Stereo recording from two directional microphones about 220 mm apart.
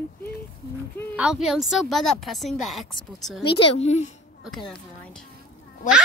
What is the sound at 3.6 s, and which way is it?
Speech, 30° left (ahead or behind).